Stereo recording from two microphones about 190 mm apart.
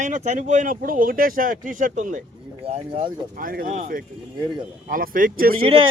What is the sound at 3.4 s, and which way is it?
Speech, 50° right (ahead or behind).